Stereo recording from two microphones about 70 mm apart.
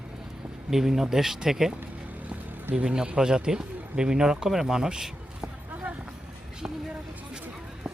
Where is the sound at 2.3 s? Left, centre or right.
Right.